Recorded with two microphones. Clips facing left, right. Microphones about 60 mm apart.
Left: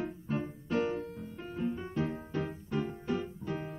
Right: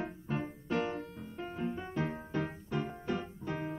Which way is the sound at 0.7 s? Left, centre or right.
Right.